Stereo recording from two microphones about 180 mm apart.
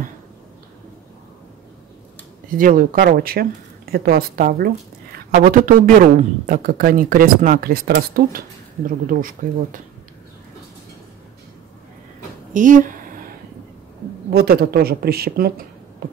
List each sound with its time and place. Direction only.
2.5 s a woman's voice: 50° right (ahead or behind)
12.5 s a woman's voice: 45° right (ahead or behind)
14.3 s speech: 60° right (ahead or behind)
16.0 s a sound: 60° right (ahead or behind)